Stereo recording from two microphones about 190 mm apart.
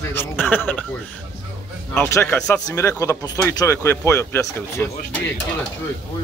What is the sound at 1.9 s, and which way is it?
Speech, 10° left (ahead or behind).